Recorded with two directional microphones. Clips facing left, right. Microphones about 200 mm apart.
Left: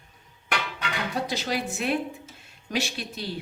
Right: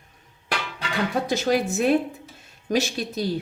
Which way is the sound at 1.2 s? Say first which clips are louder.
Right 7 dB; 45° right (ahead or behind).